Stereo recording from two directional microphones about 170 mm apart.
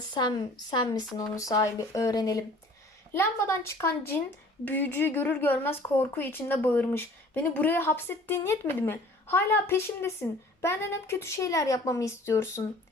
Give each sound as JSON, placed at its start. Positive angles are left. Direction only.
{"t": 0.1, "sound": "a woman's voice", "side_deg": 25}